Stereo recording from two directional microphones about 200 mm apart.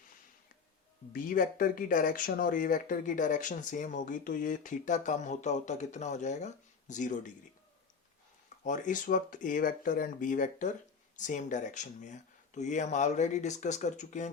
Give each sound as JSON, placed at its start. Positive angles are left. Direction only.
{"t": 1.1, "sound": "speech", "side_deg": 45}
{"t": 8.6, "sound": "speech", "side_deg": 40}